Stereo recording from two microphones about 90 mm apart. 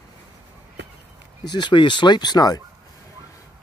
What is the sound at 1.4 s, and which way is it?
Speech, 55° left (ahead or behind).